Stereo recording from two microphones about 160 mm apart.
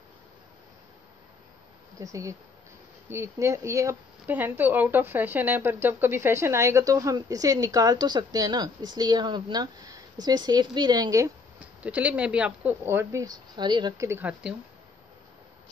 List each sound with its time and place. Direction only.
2.0 s speech: 20° right (ahead or behind)
11.8 s speech: 10° right (ahead or behind)